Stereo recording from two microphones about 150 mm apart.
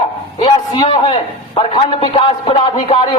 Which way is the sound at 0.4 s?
35° left (ahead or behind).